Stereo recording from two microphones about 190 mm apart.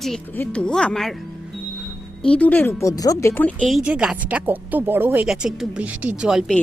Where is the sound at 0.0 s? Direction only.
5° left (ahead or behind).